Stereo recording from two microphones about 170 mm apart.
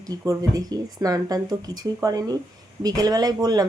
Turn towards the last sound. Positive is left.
turn(degrees=-25)  # may be behind; listen again after turning